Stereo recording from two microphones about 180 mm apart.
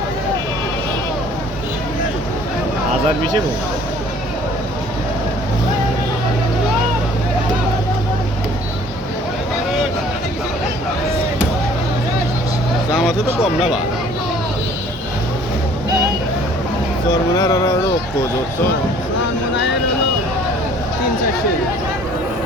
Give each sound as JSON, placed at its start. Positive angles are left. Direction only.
{"t": 17.1, "sound": "speech", "side_deg": 20}